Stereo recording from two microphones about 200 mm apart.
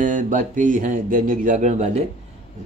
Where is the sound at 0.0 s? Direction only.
40° right (ahead or behind).